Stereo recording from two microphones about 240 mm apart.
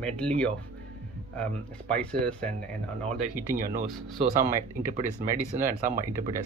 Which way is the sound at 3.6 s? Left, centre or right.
Right.